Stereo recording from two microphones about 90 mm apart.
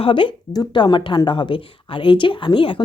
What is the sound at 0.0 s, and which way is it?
Speech, 70° left (ahead or behind).